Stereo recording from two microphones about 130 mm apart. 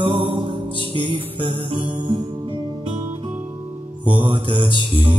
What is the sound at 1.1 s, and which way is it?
Music, 40° right (ahead or behind).